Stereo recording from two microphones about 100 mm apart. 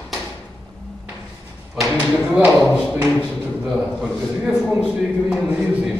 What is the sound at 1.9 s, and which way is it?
Tap, 15° right (ahead or behind).